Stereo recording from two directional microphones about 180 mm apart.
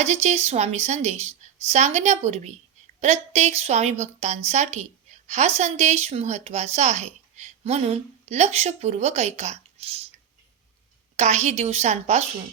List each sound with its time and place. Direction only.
0.0 s a woman's voice: 40° right (ahead or behind)
11.2 s a woman's voice: 40° right (ahead or behind)